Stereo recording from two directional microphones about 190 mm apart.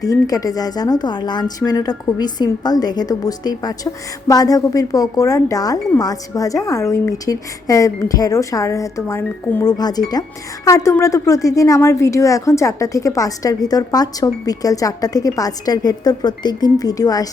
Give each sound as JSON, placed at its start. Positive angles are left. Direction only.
{"t": 0.0, "sound": "a woman's voice", "side_deg": 20}